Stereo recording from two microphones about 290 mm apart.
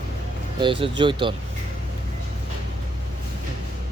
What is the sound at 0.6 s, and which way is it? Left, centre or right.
Speech, centre.